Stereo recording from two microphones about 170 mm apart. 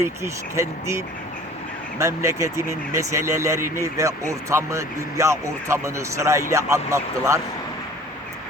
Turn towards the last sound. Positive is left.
turn(degrees=-15)  # may be behind; listen again after turning